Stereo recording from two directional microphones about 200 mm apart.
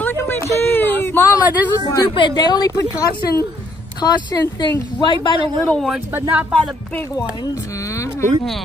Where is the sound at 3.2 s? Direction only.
50° left (ahead or behind).